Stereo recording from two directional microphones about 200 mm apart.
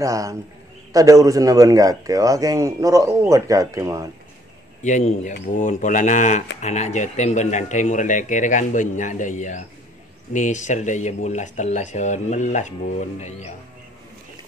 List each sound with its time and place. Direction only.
0.0 s a man's voice: 15° right (ahead or behind)
4.8 s speech: 35° left (ahead or behind)